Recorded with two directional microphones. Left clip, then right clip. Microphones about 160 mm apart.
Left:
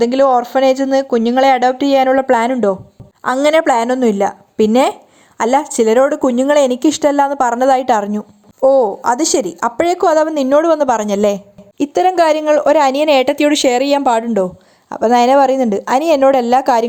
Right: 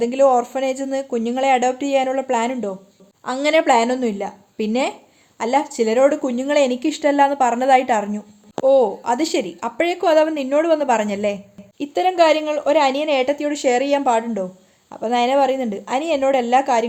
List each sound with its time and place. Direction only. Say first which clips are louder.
0.0 s a woman's voice: left 4 dB; 25° left (ahead or behind); by 16.8 s 50° left (ahead or behind)